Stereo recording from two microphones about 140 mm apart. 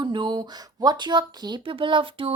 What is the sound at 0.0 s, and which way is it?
Speech, 35° right (ahead or behind).